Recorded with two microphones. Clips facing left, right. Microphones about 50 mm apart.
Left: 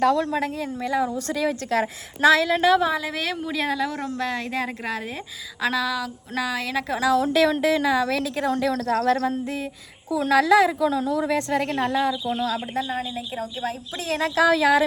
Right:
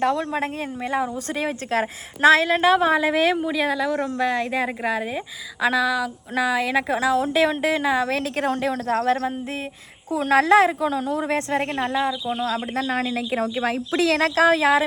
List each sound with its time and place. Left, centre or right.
0.0 s a woman's voice: centre
0.3 s a woman's voice: right
3.4 s a woman's voice: centre; by 8.2 s right
8.2 s a woman's voice: right
8.6 s a woman's voice: right
10.1 s a woman's voice: right
12.7 s a woman's voice: right
14.3 s a woman's voice: right